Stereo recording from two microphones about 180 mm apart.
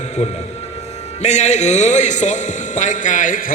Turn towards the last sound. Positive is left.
turn(degrees=45)  # may be behind; listen again after turning